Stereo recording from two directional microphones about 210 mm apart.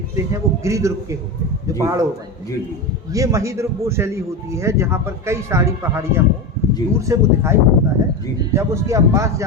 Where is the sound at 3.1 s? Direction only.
15° right (ahead or behind).